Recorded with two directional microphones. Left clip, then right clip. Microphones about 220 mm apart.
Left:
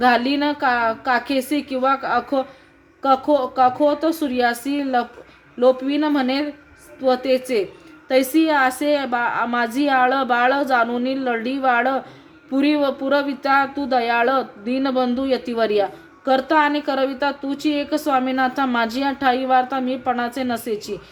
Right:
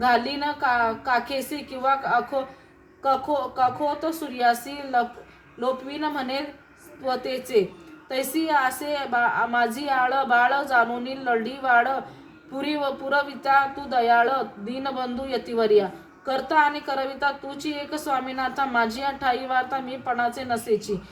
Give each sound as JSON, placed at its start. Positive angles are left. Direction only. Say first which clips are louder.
{"t": 0.0, "sound": "speech", "louder": "left 5 dB", "side_deg": 45}